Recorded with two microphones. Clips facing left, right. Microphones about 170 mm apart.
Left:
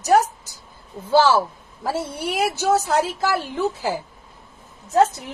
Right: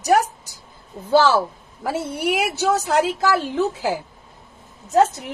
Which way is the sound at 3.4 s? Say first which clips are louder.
Right 2 dB; 15° right (ahead or behind).